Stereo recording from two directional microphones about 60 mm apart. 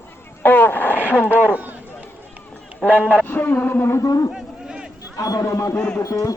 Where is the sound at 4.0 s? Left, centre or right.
Left.